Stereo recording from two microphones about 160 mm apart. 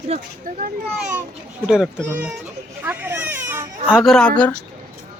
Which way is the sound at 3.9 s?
5° left (ahead or behind).